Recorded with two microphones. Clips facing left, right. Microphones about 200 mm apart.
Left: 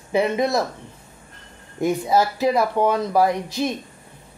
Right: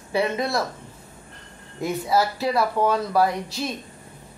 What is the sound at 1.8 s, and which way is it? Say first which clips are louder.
Speech: left 3 dB; 20° left (ahead or behind).